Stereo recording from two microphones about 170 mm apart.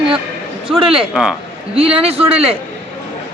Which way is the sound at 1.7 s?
35° right (ahead or behind).